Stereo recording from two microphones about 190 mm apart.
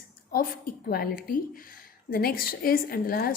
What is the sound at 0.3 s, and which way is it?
Speech, 50° left (ahead or behind).